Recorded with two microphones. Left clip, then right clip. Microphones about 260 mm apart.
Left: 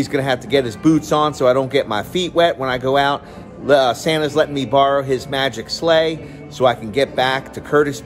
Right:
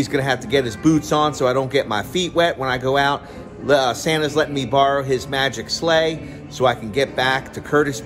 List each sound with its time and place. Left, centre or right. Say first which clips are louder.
0.0 s speech: left 1 dB; centre